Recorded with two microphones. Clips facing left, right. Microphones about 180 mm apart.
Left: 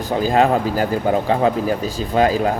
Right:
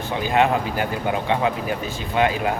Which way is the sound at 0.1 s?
35° left (ahead or behind).